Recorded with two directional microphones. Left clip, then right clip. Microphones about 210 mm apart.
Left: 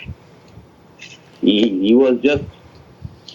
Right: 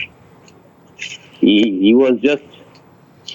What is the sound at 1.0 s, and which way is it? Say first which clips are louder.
A man's voice: right 3 dB; 50° right (ahead or behind).